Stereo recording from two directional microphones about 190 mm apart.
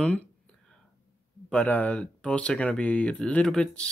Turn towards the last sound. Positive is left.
turn(degrees=5)  # may be behind; listen again after turning